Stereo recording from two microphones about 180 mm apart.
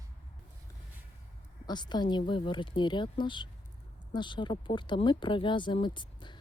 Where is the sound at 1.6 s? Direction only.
25° left (ahead or behind).